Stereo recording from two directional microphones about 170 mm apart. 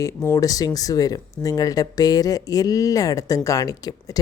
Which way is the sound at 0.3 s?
20° left (ahead or behind).